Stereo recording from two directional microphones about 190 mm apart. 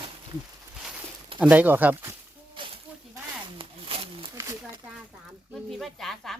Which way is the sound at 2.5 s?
25° right (ahead or behind).